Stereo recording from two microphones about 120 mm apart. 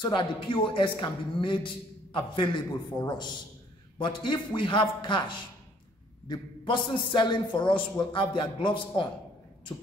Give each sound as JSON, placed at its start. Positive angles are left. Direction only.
{"t": 0.0, "sound": "a man's voice", "side_deg": 45}